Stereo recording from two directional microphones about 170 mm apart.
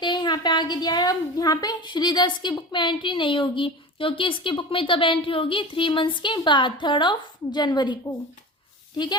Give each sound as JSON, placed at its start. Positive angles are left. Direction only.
{"t": 0.0, "sound": "a woman's voice", "side_deg": 25}